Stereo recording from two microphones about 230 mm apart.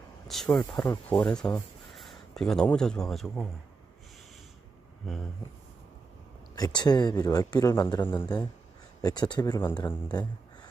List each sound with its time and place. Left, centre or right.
0.3 s speech: centre
6.6 s speech: centre